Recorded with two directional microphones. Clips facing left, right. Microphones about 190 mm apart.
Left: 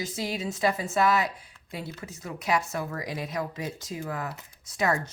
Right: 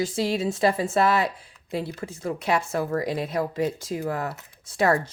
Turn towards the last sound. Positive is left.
turn(degrees=-30)  # may be behind; listen again after turning